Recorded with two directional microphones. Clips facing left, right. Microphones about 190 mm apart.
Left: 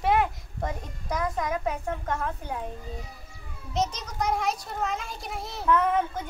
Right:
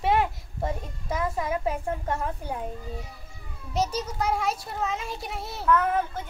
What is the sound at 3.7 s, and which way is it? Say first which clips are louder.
A woman's voice: right 1 dB; 10° right (ahead or behind).